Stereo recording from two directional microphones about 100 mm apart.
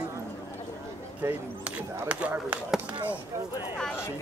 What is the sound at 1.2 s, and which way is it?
Speech, 25° right (ahead or behind).